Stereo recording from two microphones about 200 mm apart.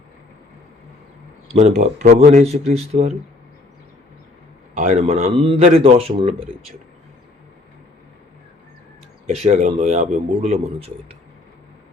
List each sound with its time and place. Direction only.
1.5 s speech: 35° right (ahead or behind)
4.7 s speech: 35° right (ahead or behind)
9.2 s speech: 35° right (ahead or behind)